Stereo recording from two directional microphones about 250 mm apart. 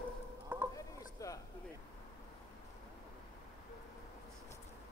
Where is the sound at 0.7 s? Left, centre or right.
Centre.